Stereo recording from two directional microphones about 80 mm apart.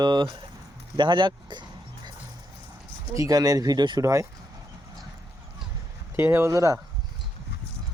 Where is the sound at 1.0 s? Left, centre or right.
Right.